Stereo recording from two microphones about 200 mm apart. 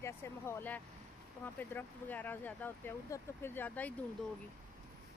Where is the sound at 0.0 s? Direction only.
10° left (ahead or behind).